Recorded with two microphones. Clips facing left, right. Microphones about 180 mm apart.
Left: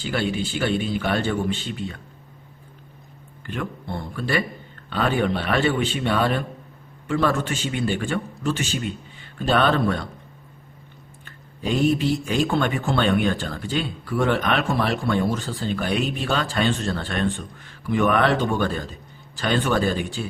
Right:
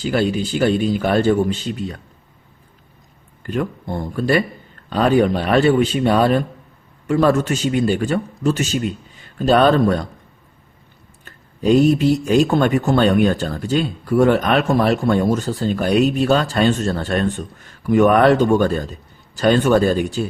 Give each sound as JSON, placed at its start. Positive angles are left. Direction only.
{"t": 0.0, "sound": "a man's voice", "side_deg": -40}
{"t": 3.4, "sound": "a man's voice", "side_deg": -40}
{"t": 11.3, "sound": "speech", "side_deg": -40}